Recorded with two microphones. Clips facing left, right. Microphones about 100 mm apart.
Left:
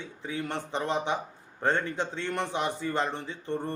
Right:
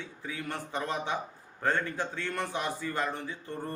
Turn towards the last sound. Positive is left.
turn(degrees=25)  # may be behind; listen again after turning